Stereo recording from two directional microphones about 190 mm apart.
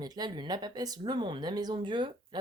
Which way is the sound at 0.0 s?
20° right (ahead or behind).